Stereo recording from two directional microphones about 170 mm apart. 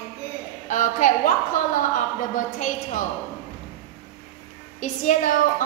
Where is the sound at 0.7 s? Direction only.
45° left (ahead or behind).